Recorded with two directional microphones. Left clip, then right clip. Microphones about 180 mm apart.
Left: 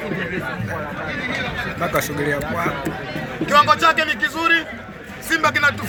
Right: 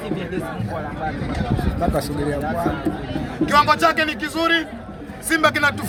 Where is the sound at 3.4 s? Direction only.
30° right (ahead or behind).